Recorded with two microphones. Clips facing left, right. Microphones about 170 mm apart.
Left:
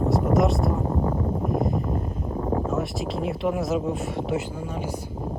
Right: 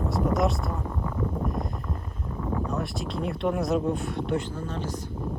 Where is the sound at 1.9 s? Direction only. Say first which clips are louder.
Left 8 dB; 35° left (ahead or behind).